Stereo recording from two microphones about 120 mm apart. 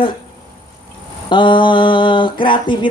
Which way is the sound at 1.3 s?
40° left (ahead or behind).